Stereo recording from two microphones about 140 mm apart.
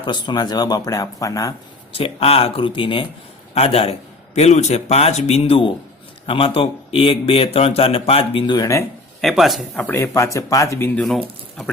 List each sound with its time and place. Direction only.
0.0 s speech: 35° left (ahead or behind)
1.9 s a man's voice: 40° left (ahead or behind); by 8.8 s 25° left (ahead or behind)
9.2 s speech: centre (ahead or behind)
9.8 s speech: 15° left (ahead or behind)